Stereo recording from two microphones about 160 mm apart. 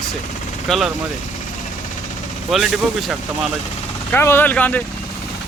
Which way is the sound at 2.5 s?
Centre (ahead or behind).